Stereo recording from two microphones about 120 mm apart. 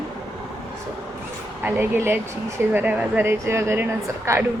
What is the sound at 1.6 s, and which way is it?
A woman's voice, 20° right (ahead or behind).